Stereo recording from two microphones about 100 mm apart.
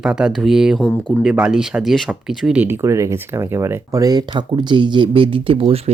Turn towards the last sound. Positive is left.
turn(degrees=-70)  # may be behind; listen again after turning